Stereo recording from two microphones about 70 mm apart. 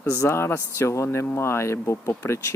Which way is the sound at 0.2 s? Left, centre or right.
Left.